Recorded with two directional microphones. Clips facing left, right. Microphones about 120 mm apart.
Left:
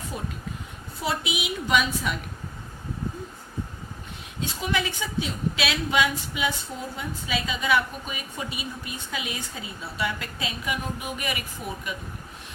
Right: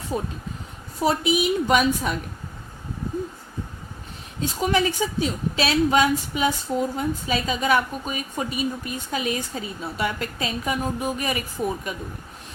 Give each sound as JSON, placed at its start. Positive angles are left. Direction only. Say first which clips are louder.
{"t": 0.1, "sound": "a woman's voice", "louder": "right 8 dB", "side_deg": -35}
{"t": 4.4, "sound": "a woman's voice", "louder": "right 6 dB", "side_deg": -40}